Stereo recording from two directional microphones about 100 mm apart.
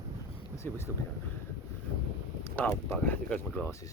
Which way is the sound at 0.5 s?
25° left (ahead or behind).